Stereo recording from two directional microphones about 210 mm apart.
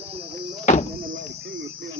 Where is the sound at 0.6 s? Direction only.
35° left (ahead or behind).